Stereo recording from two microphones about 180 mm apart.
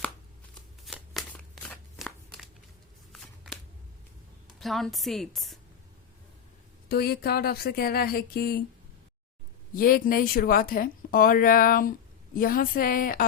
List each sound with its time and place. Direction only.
0.9 s a sound: 5° left (ahead or behind)
4.4 s a woman's voice: centre (ahead or behind)
6.8 s speech: 60° left (ahead or behind)
9.7 s speech: 50° left (ahead or behind)